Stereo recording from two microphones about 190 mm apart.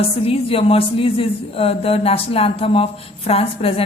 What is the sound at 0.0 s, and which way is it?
A woman's voice, 30° left (ahead or behind).